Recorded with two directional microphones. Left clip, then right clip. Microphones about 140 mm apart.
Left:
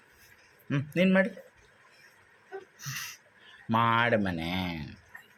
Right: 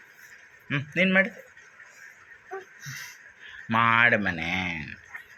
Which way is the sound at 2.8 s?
55° left (ahead or behind).